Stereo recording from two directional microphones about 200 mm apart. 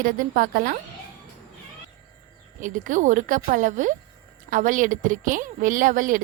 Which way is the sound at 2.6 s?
40° right (ahead or behind).